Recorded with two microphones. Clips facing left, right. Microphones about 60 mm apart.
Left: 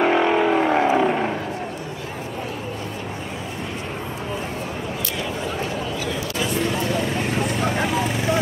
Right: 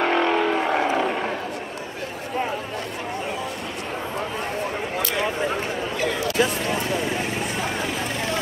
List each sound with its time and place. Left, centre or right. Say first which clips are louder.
0.0 s vehicle: left 3 dB; centre
5.9 s chatter: right 4 dB; right